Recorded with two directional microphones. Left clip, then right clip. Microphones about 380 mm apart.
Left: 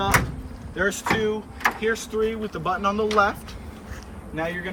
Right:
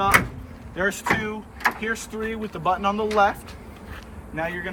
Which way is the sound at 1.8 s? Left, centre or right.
Centre.